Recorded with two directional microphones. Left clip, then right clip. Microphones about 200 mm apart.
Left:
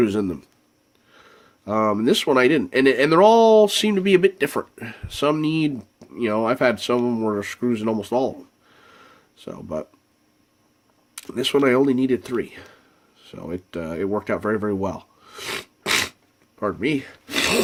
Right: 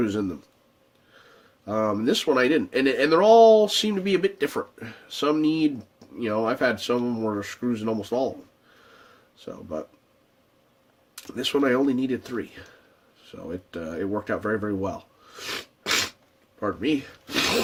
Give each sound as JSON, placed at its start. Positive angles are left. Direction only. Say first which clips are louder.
{"t": 0.0, "sound": "speech", "louder": "left 5 dB", "side_deg": 55}
{"t": 1.6, "sound": "speech", "louder": "left 4 dB", "side_deg": 55}
{"t": 9.4, "sound": "speech", "louder": "left 4 dB", "side_deg": 55}
{"t": 11.1, "sound": "speech", "louder": "left 5 dB", "side_deg": 55}